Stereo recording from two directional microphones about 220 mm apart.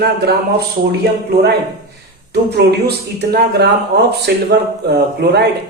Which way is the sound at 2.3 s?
50° right (ahead or behind).